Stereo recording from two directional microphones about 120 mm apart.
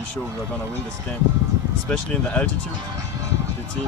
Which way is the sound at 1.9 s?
10° left (ahead or behind).